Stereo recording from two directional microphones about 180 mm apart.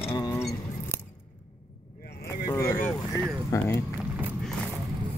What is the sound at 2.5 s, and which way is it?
Vehicle, 15° left (ahead or behind).